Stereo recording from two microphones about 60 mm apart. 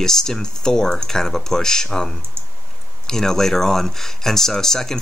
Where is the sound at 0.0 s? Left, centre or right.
Centre.